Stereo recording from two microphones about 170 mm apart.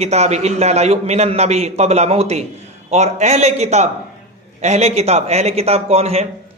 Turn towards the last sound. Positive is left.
turn(degrees=-35)  # may be behind; listen again after turning